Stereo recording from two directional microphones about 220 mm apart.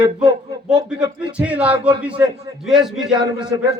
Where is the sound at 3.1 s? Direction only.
20° right (ahead or behind).